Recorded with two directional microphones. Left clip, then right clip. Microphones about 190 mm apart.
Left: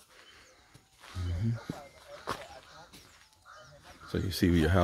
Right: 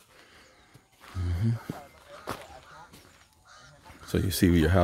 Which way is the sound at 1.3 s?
20° right (ahead or behind).